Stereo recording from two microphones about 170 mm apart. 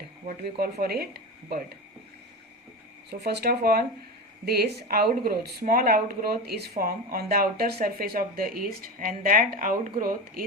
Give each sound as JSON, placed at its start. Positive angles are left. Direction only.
{"t": 0.6, "sound": "speech", "side_deg": -65}
{"t": 3.1, "sound": "speech", "side_deg": -75}